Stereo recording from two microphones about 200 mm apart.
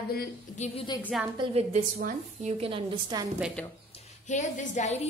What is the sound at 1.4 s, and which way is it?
Speech, 30° right (ahead or behind).